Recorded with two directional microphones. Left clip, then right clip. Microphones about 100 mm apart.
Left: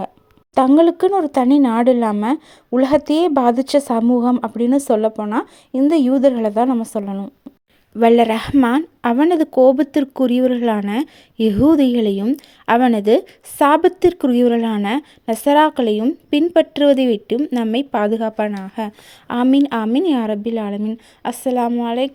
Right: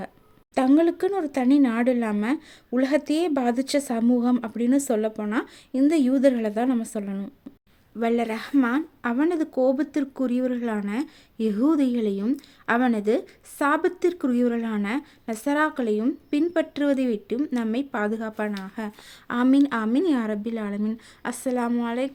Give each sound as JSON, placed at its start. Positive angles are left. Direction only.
{"t": 0.8, "sound": "a woman's voice", "side_deg": 35}
{"t": 4.2, "sound": "a woman's voice", "side_deg": 25}
{"t": 7.9, "sound": "speech", "side_deg": 90}
{"t": 19.5, "sound": "a woman's voice", "side_deg": 45}